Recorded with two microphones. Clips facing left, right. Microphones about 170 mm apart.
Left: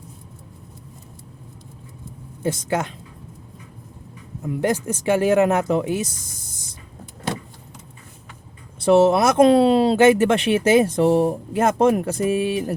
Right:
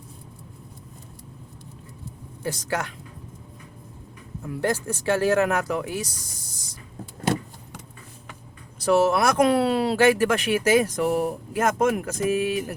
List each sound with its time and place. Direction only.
2.4 s speech: 20° left (ahead or behind)
4.4 s speech: 20° left (ahead or behind)
8.8 s speech: 25° left (ahead or behind)